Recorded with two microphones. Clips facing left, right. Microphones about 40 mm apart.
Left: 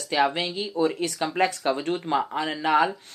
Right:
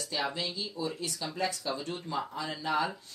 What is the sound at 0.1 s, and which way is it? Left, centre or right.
Speech, left.